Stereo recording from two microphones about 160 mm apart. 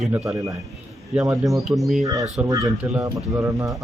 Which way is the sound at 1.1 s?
15° right (ahead or behind).